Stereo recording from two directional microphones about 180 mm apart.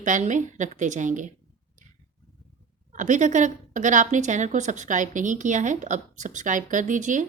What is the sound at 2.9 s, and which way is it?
A woman's voice, 45° right (ahead or behind).